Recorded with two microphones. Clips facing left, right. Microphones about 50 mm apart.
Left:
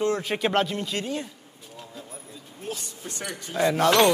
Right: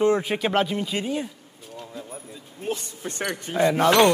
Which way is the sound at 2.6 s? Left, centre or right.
Right.